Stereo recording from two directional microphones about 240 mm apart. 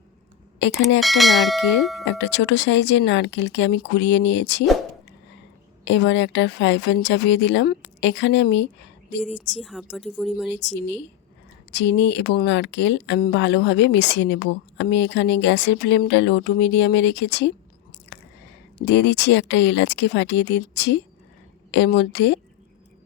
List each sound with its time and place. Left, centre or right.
0.6 s speech: left
0.9 s speech: centre
2.0 s speech: left
5.8 s speech: left
9.5 s speech: centre
10.5 s speech: left
18.1 s a sound: left
18.9 s speech: left